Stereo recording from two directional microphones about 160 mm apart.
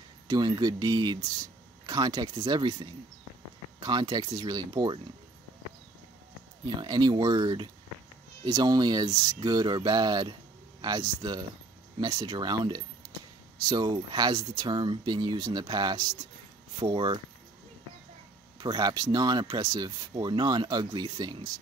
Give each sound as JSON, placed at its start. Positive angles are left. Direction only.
{"t": 0.3, "sound": "speech", "side_deg": -25}
{"t": 6.8, "sound": "speech", "side_deg": -25}
{"t": 18.6, "sound": "speech", "side_deg": -25}